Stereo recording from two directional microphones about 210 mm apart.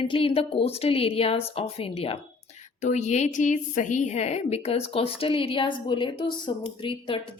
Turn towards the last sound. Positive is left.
turn(degrees=25)  # may be behind; listen again after turning